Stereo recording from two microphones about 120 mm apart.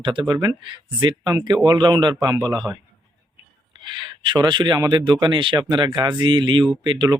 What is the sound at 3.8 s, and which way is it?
Speech, 40° right (ahead or behind).